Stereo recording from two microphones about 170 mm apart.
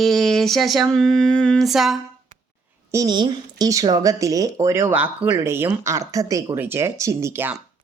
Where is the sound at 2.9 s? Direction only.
20° right (ahead or behind).